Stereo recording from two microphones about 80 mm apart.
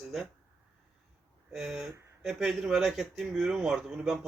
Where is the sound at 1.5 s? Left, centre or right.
Centre.